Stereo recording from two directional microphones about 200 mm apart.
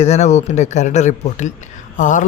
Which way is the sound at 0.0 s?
35° left (ahead or behind).